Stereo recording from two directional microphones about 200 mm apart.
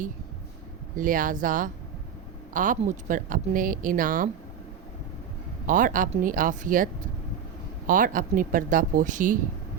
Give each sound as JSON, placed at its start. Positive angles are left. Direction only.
{"t": 0.9, "sound": "speech", "side_deg": -45}
{"t": 5.6, "sound": "speech", "side_deg": -40}